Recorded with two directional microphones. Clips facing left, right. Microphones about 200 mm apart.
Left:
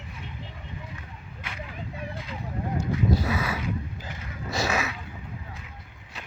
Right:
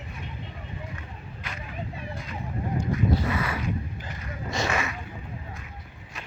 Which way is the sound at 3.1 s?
10° left (ahead or behind).